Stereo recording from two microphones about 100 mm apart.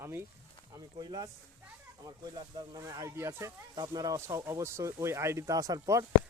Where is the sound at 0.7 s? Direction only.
40° right (ahead or behind).